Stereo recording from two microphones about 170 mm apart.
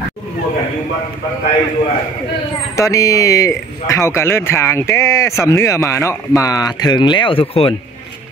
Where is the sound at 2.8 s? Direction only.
20° left (ahead or behind).